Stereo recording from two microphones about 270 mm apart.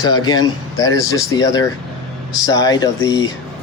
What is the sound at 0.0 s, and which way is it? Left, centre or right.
Speech, centre.